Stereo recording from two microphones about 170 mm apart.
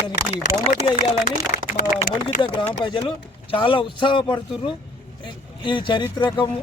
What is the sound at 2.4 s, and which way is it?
Speech, 30° left (ahead or behind).